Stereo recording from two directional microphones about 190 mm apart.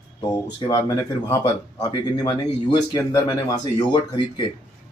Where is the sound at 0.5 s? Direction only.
20° left (ahead or behind).